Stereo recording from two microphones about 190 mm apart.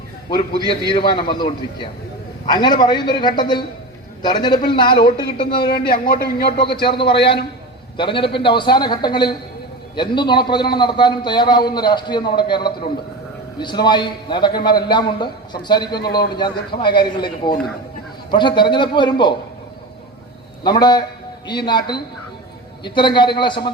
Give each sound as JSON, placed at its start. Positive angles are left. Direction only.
{"t": 0.3, "sound": "a man's voice", "side_deg": 25}
{"t": 5.9, "sound": "speech", "side_deg": 55}
{"t": 7.9, "sound": "a man's voice", "side_deg": 25}
{"t": 20.7, "sound": "a man's voice", "side_deg": 20}